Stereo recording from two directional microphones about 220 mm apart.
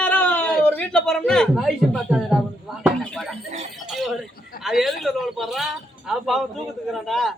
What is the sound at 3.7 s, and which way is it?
Music, centre (ahead or behind).